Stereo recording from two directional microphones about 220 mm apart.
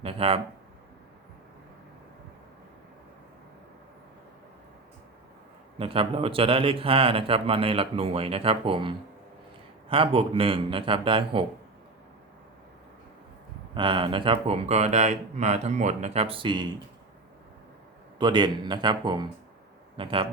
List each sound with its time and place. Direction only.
0.0 s a man's voice: 25° right (ahead or behind)
5.8 s a man's voice: 25° right (ahead or behind)
13.7 s a man's voice: 20° right (ahead or behind)
18.2 s a man's voice: 20° right (ahead or behind)